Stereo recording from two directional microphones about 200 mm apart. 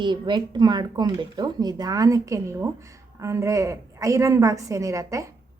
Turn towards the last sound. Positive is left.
turn(degrees=-15)  # may be behind; listen again after turning